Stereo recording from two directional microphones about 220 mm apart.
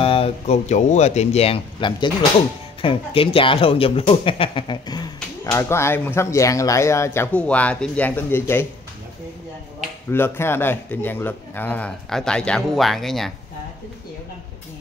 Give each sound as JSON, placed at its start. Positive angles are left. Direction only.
{"t": 0.0, "sound": "speech", "side_deg": 25}
{"t": 10.1, "sound": "speech", "side_deg": 10}